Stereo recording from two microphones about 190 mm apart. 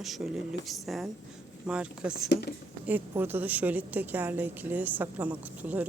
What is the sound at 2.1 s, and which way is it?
Speech, 55° left (ahead or behind).